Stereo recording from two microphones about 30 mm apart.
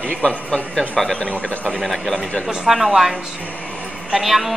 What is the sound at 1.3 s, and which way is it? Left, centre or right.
Speech, left.